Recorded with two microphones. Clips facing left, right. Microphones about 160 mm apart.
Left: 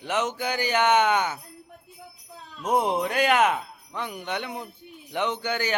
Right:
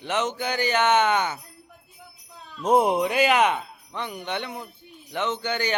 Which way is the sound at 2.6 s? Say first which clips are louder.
Right 4 dB; 25° right (ahead or behind).